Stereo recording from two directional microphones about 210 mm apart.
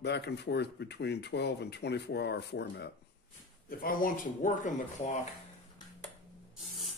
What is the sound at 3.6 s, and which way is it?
Speech, 45° left (ahead or behind).